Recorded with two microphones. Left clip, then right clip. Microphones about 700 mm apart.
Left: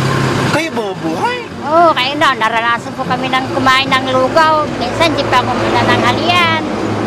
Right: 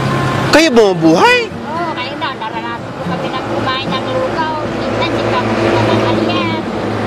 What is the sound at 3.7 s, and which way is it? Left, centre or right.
Speech, left.